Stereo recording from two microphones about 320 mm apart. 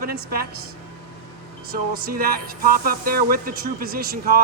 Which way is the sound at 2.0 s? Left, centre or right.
Right.